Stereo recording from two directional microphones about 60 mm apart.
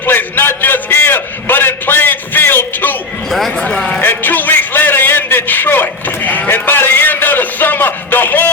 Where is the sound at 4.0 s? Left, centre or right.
Left.